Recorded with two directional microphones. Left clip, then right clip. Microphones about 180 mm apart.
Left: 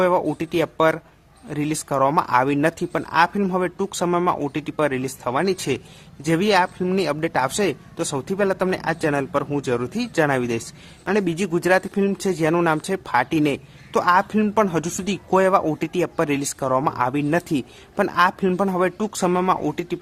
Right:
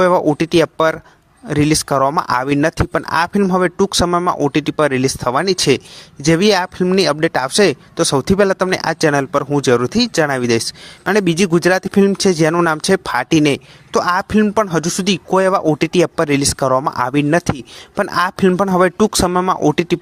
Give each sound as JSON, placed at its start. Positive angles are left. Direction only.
{"t": 0.0, "sound": "speech", "side_deg": -35}